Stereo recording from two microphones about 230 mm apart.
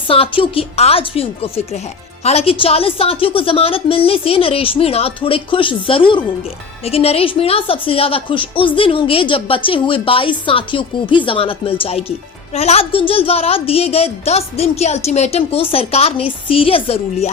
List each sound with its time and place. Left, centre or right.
0.1 s a woman's voice: left